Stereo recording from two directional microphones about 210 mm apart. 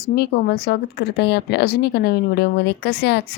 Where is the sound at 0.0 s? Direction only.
50° left (ahead or behind).